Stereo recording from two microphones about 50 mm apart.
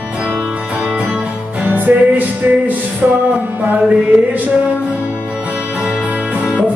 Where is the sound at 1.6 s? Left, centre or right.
Right.